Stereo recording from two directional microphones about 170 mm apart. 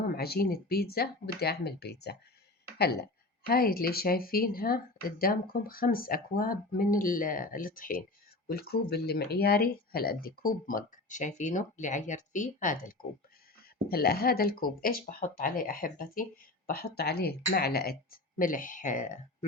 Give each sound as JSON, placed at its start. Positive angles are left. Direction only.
{"t": 0.2, "sound": "speech", "side_deg": 65}
{"t": 13.8, "sound": "speech", "side_deg": 65}